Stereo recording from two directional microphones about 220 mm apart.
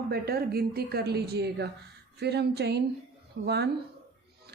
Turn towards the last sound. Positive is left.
turn(degrees=-50)  # may be behind; listen again after turning